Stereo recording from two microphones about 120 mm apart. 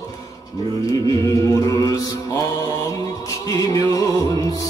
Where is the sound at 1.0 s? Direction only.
25° left (ahead or behind).